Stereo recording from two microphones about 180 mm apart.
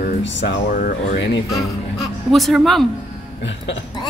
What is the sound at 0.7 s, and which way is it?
Speech, 50° left (ahead or behind).